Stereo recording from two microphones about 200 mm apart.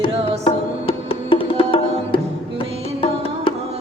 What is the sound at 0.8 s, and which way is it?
Music, 25° left (ahead or behind).